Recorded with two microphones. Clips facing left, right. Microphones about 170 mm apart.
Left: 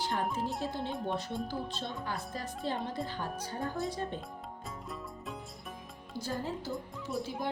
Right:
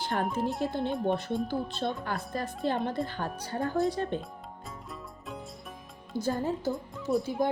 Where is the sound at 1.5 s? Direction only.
60° right (ahead or behind).